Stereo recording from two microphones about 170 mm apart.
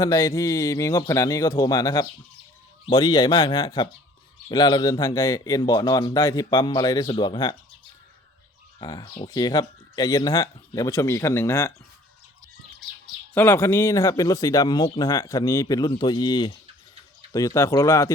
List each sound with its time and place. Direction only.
0.0 s speech: 20° left (ahead or behind)
8.8 s speech: 25° left (ahead or behind)
13.3 s speech: 15° left (ahead or behind)